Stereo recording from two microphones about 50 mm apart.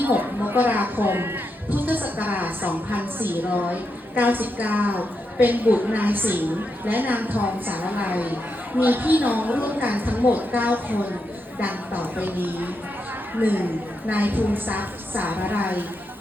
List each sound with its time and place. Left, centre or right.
0.0 s a woman's voice: right
1.7 s a woman's voice: right